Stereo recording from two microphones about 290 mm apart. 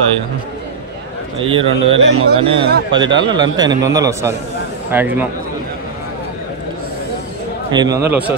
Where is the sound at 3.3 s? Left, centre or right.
Centre.